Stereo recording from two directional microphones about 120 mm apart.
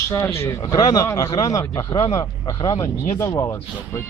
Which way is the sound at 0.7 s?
30° left (ahead or behind).